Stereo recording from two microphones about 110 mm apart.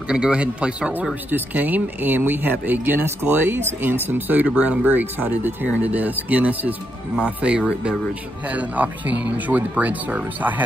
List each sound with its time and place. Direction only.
0.1 s speech: 10° right (ahead or behind)